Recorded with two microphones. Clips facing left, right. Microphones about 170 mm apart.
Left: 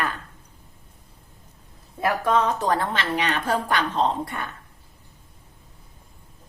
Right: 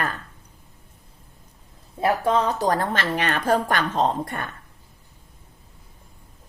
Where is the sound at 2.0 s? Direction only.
30° right (ahead or behind); by 4.5 s 50° right (ahead or behind).